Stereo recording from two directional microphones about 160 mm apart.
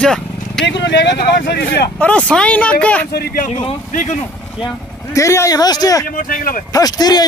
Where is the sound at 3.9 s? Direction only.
50° left (ahead or behind).